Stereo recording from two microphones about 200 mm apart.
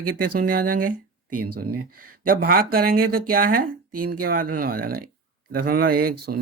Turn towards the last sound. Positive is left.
turn(degrees=-50)  # may be behind; listen again after turning